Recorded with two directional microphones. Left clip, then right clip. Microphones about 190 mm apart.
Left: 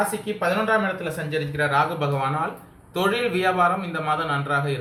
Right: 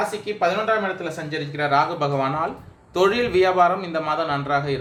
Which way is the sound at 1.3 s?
45° right (ahead or behind).